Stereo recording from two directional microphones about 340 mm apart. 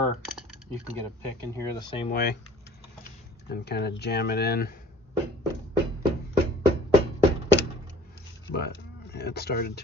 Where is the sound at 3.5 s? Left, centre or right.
Left.